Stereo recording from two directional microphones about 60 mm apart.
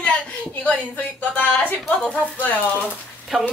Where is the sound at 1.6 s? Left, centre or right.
Left.